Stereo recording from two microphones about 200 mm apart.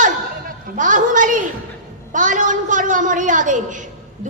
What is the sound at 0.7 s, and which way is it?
A woman's voice, 40° right (ahead or behind).